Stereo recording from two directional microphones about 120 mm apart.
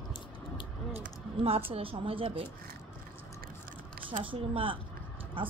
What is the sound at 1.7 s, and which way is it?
Speech, 50° right (ahead or behind).